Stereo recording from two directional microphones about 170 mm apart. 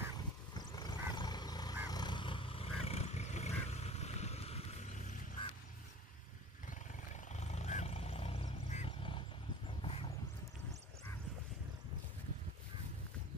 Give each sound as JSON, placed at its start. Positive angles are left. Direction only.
{"t": 0.6, "sound": "vehicle", "side_deg": 25}
{"t": 7.1, "sound": "a sound", "side_deg": 40}
{"t": 9.8, "sound": "vehicle", "side_deg": 35}